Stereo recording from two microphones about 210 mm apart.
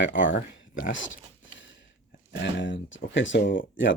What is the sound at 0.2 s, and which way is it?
Speech, 65° left (ahead or behind).